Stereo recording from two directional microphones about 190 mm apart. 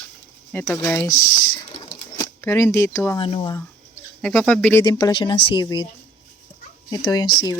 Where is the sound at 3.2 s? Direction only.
25° left (ahead or behind).